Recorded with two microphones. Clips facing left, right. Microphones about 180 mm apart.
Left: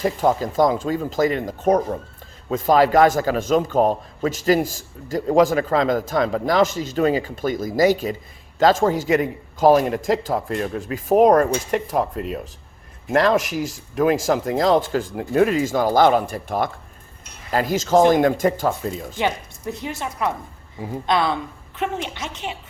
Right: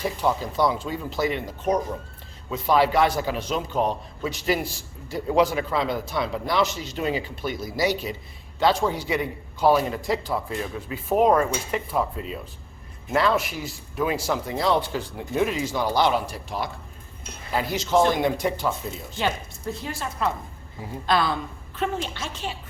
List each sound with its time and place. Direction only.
0.0 s a man's voice: 45° left (ahead or behind)
12.1 s speech: 60° left (ahead or behind)
13.2 s a man's voice: 45° left (ahead or behind)
19.2 s speech: 20° left (ahead or behind)